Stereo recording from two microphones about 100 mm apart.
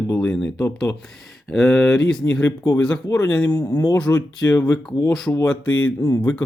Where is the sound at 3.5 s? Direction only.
35° left (ahead or behind).